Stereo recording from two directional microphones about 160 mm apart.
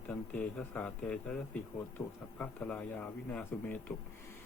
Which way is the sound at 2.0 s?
35° left (ahead or behind).